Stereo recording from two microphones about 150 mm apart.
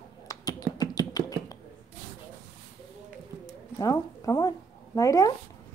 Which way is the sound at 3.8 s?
25° left (ahead or behind).